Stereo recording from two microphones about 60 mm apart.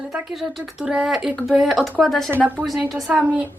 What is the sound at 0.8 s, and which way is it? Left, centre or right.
Speech, centre.